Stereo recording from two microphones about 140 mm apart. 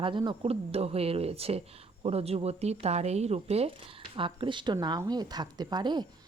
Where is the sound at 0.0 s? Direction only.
35° right (ahead or behind).